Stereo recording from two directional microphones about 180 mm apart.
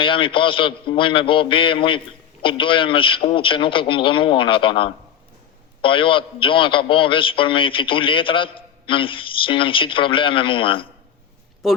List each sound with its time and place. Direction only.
0.0 s a man's voice: 30° left (ahead or behind)
11.6 s speech: centre (ahead or behind)